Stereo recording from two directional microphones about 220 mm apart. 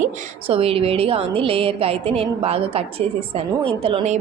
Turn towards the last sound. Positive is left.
turn(degrees=-25)  # may be behind; listen again after turning